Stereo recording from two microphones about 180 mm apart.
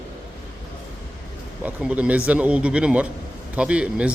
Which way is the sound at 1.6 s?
10° right (ahead or behind).